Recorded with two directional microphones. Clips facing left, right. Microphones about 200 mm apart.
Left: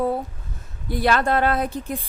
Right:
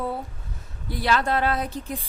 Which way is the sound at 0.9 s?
50° left (ahead or behind).